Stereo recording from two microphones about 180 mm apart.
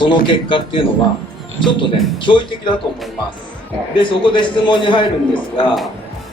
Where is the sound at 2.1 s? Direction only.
25° left (ahead or behind).